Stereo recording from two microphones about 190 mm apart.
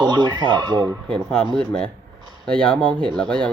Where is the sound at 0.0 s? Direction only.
25° right (ahead or behind).